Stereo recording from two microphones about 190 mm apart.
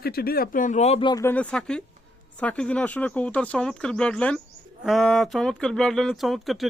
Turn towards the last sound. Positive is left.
turn(degrees=0)  # may be behind; listen again after turning